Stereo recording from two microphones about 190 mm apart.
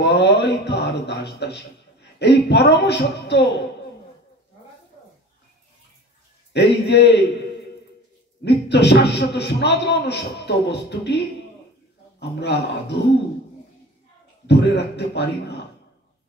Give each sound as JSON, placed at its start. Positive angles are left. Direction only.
{"t": 0.0, "sound": "a sound", "side_deg": 65}
{"t": 6.5, "sound": "a man's voice", "side_deg": 60}
{"t": 8.5, "sound": "a man's voice", "side_deg": 65}
{"t": 14.5, "sound": "a man's voice", "side_deg": 60}